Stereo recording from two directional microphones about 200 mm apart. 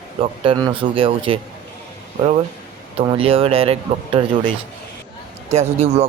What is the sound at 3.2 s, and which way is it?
A man's voice, 30° right (ahead or behind).